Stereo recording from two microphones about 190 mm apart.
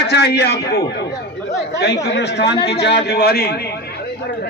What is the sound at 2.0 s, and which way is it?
A man's voice, 65° left (ahead or behind).